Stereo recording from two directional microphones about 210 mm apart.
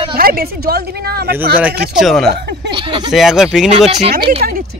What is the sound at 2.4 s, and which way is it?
Speech, 55° right (ahead or behind).